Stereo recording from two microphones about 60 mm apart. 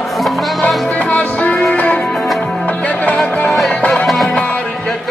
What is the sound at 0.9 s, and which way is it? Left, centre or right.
Music, left.